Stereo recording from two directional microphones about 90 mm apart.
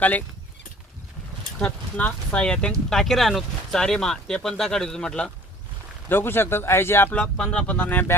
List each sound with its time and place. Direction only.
0.0 s speech: 20° left (ahead or behind)
1.5 s speech: 15° left (ahead or behind)
6.1 s speech: 25° left (ahead or behind)
7.3 s speech: 10° left (ahead or behind)